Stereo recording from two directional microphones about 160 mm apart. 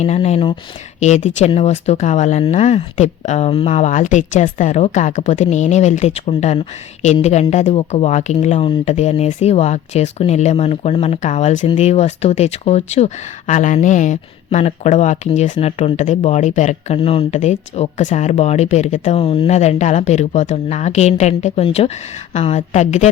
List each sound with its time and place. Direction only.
0.0 s speech: 45° left (ahead or behind)